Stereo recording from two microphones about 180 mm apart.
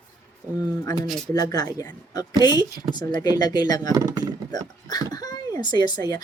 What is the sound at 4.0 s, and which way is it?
Speech, 20° right (ahead or behind).